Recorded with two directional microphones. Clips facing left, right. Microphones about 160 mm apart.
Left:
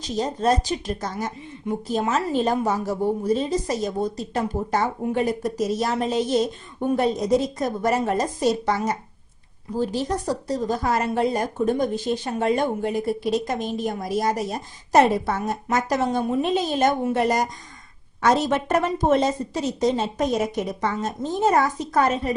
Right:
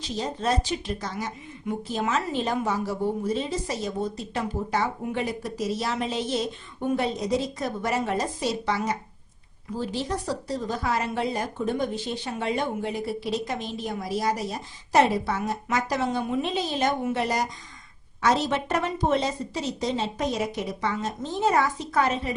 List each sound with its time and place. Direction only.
0.0 s a woman's voice: 45° left (ahead or behind)